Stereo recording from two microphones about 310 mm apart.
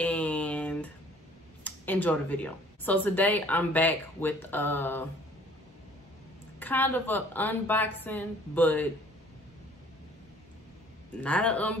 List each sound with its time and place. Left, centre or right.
0.0 s a sound: centre
1.6 s speech: centre
6.6 s speech: centre
11.1 s speech: centre